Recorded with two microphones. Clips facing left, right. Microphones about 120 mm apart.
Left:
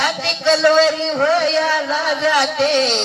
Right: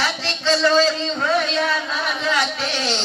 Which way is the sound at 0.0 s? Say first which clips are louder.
Left 5 dB; 65° left (ahead or behind).